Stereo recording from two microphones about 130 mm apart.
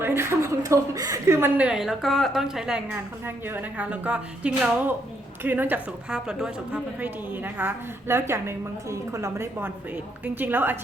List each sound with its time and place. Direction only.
0.0 s a woman's voice: 20° right (ahead or behind)
2.9 s a woman's voice: 15° right (ahead or behind)